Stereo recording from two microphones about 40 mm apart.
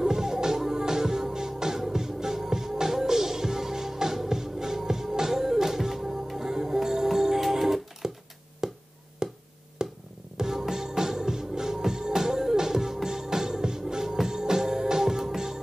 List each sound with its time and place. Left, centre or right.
0.0 s music: centre
8.6 s a sound: centre
9.2 s music: centre